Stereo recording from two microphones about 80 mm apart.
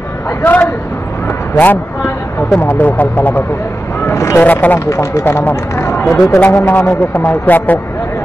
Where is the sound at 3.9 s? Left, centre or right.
Left.